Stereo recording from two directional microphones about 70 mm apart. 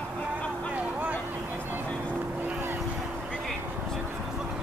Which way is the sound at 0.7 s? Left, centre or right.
Right.